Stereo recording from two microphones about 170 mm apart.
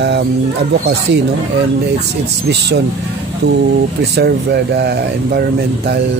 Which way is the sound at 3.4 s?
75° right (ahead or behind).